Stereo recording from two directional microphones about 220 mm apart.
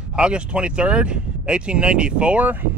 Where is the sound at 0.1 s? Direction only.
5° right (ahead or behind).